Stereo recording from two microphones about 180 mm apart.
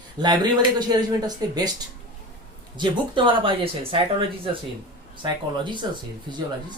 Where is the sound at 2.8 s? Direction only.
25° right (ahead or behind).